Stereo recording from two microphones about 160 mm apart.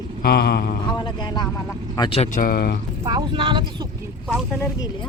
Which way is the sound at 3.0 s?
30° right (ahead or behind).